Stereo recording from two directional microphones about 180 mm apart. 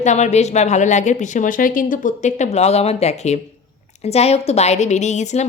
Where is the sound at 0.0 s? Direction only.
40° left (ahead or behind).